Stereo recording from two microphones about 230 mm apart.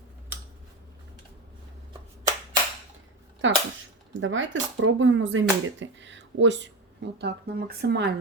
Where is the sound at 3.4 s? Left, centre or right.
Right.